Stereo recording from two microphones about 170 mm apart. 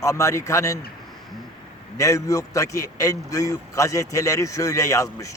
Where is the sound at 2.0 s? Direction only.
20° left (ahead or behind).